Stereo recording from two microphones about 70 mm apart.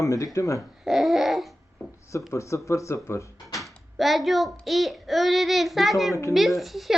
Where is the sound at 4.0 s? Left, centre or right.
Centre.